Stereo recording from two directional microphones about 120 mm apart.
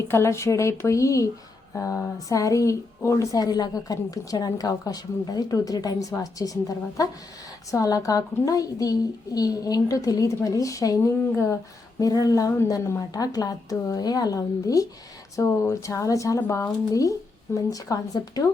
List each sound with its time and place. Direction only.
0.1 s a woman's voice: 25° left (ahead or behind)